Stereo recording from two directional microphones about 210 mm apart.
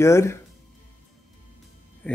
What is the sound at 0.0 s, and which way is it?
Speech, 15° left (ahead or behind).